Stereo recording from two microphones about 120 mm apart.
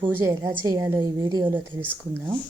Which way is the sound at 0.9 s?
35° right (ahead or behind).